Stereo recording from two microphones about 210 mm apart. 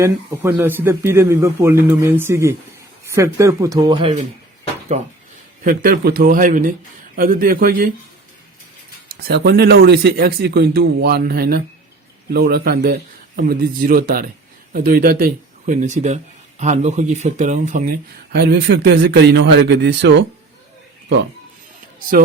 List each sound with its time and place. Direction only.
0.0 s speech: 10° right (ahead or behind)
5.6 s a man's voice: 45° right (ahead or behind)
9.2 s a man's voice: 50° right (ahead or behind)